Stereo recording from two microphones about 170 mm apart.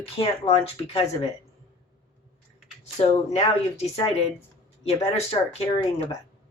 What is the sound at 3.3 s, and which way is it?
Speech, 35° left (ahead or behind).